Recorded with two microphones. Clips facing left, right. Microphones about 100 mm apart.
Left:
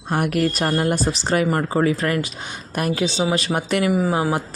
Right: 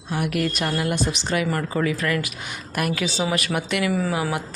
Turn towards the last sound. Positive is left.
turn(degrees=30)  # may be behind; listen again after turning